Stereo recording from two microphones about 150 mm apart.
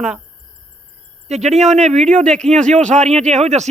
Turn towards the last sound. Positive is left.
turn(degrees=-50)  # may be behind; listen again after turning